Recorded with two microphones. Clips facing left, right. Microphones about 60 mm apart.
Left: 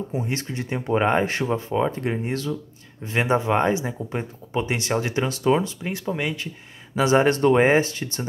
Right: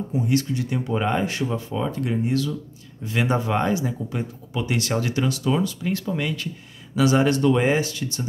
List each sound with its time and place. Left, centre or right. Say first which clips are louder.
0.1 s speech: right 5 dB; left